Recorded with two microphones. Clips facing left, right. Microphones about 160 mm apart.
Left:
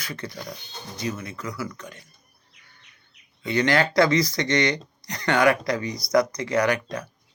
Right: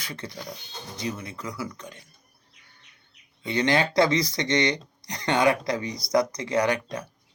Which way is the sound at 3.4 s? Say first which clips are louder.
Left 2 dB; 20° right (ahead or behind).